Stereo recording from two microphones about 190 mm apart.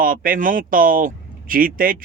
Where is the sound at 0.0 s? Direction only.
50° right (ahead or behind).